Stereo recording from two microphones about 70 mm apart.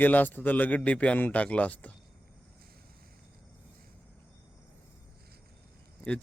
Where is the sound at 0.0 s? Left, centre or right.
Left.